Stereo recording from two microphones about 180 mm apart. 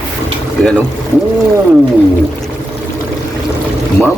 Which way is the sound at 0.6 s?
5° left (ahead or behind).